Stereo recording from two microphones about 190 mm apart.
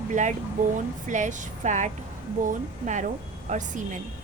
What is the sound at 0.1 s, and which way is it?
A woman's voice, 40° right (ahead or behind).